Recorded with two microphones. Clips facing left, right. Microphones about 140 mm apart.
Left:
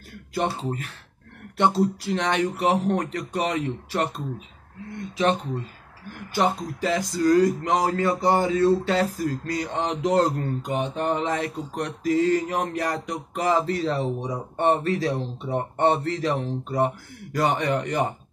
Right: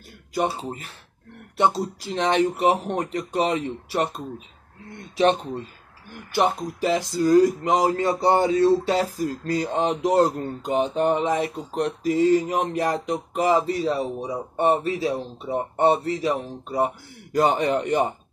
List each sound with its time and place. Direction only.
1.6 s speech: 20° right (ahead or behind)
5.1 s speech: 30° right (ahead or behind); by 16.9 s 10° right (ahead or behind)
17.3 s speech: 25° right (ahead or behind)